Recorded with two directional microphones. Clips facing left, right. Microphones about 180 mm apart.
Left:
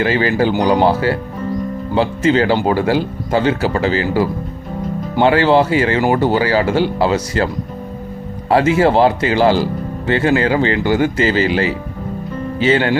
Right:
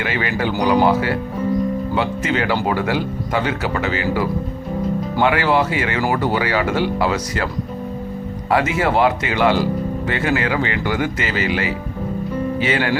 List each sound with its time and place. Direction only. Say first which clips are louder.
0.0 s speech: left 7 dB; 30° left (ahead or behind)
8.4 s speech: left 6 dB; 30° left (ahead or behind)